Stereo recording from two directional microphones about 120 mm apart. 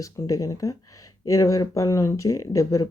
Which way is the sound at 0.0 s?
30° left (ahead or behind).